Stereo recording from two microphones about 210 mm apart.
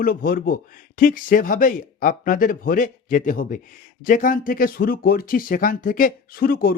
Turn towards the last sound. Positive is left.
turn(degrees=45)  # may be behind; listen again after turning